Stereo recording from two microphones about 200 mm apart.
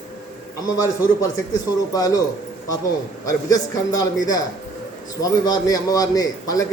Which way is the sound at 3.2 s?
20° left (ahead or behind).